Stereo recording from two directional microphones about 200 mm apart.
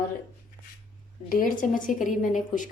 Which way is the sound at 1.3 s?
45° left (ahead or behind).